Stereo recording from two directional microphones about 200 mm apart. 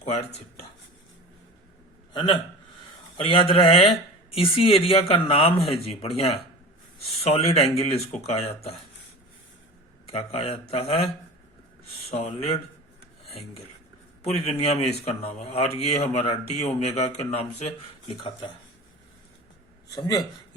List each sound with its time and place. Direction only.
0.0 s speech: 30° left (ahead or behind)
2.1 s a man's voice: 25° left (ahead or behind)
10.1 s a man's voice: 30° left (ahead or behind)
14.3 s speech: 30° left (ahead or behind)
19.9 s a man's voice: 20° left (ahead or behind)